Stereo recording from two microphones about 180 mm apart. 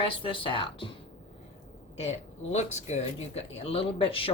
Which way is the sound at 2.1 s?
40° left (ahead or behind).